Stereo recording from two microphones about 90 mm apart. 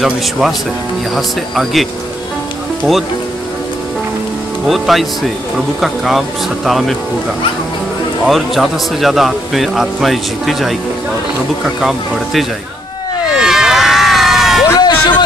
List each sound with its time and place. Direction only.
0.0 s speech: 5° right (ahead or behind)
4.6 s speech: centre (ahead or behind)
8.3 s speech: centre (ahead or behind)
13.4 s crowd: 5° right (ahead or behind)
14.7 s a sound: 55° left (ahead or behind)